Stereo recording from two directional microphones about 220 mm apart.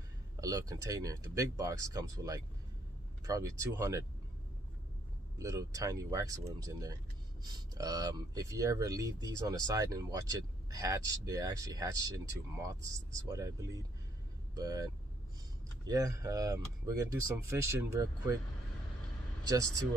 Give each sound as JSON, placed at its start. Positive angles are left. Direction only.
{"t": 0.4, "sound": "speech", "side_deg": -15}
{"t": 5.4, "sound": "speech", "side_deg": -15}
{"t": 15.9, "sound": "speech", "side_deg": -15}